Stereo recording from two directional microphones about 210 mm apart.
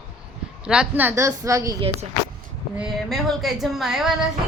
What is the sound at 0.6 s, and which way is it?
A woman's voice, 5° right (ahead or behind).